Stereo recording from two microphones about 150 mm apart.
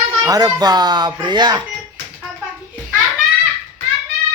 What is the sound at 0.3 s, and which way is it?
Speech, 25° right (ahead or behind).